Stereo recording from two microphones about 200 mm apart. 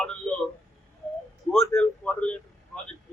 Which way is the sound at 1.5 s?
5° left (ahead or behind).